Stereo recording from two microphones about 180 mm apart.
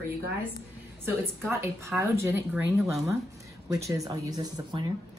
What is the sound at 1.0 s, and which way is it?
A woman's voice, 15° right (ahead or behind).